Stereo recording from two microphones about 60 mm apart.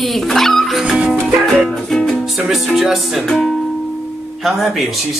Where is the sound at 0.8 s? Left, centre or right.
Centre.